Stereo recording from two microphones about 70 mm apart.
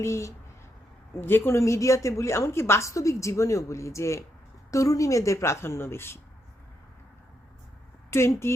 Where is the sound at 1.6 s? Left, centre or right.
Left.